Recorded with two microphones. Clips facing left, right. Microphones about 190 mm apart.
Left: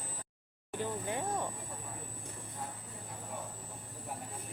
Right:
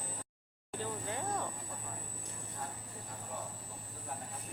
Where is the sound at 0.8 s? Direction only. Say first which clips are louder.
Left 3 dB; 15° left (ahead or behind).